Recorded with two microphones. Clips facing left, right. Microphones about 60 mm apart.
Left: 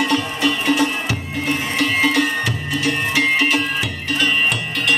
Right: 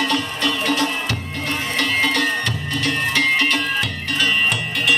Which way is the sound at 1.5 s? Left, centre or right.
Centre.